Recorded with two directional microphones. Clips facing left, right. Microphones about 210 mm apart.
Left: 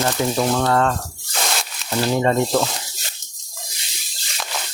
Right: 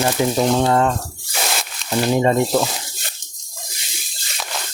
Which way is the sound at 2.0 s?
15° right (ahead or behind).